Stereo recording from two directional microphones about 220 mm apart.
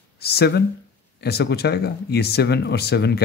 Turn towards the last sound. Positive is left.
turn(degrees=50)  # may be behind; listen again after turning